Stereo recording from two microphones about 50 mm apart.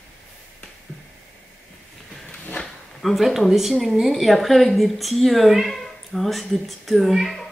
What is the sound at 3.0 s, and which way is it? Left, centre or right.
A woman's voice, centre.